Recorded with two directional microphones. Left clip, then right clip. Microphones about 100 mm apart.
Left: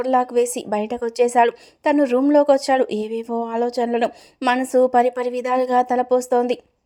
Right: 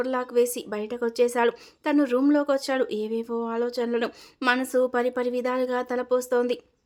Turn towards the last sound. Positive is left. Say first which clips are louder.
# left 5 dB
turn(degrees=35)  # may be behind; listen again after turning